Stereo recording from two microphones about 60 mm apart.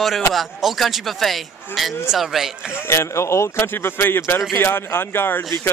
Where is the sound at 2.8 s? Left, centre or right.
Left.